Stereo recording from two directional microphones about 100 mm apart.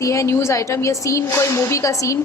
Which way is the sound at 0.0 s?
30° left (ahead or behind).